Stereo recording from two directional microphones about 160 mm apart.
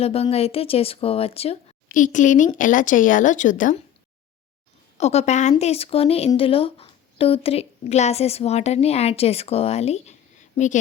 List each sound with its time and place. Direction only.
0.0 s speech: 40° left (ahead or behind)
1.9 s a woman's voice: 55° left (ahead or behind)
4.9 s speech: 45° left (ahead or behind)